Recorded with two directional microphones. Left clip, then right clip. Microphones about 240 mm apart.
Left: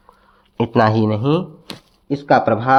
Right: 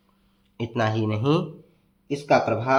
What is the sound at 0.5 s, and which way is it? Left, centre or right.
Speech, left.